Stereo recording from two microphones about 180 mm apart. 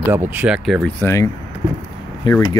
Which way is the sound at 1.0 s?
15° left (ahead or behind).